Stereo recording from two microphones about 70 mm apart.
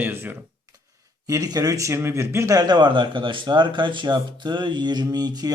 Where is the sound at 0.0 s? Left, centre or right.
Right.